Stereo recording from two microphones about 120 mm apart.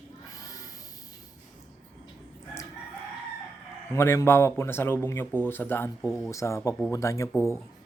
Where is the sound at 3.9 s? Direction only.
20° left (ahead or behind).